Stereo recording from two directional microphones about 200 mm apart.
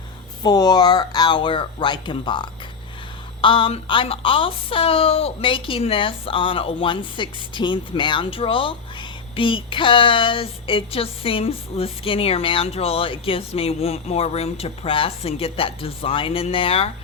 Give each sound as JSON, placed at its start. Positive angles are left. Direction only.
{"t": 0.4, "sound": "speech", "side_deg": 20}